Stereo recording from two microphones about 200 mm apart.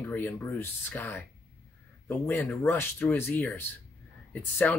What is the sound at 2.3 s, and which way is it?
Speech, 10° left (ahead or behind).